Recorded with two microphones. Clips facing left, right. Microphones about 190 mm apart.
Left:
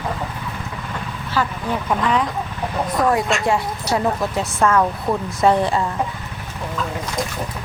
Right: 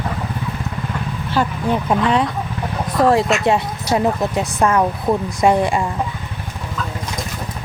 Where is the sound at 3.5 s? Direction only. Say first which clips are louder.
Right 3 dB; 20° right (ahead or behind).